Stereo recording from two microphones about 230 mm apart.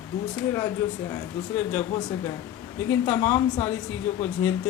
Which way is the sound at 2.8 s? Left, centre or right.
Centre.